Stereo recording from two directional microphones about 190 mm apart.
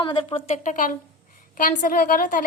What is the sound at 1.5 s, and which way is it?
Speech, 45° left (ahead or behind).